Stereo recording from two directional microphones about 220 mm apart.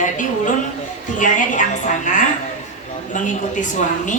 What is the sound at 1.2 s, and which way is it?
Speech, 35° left (ahead or behind).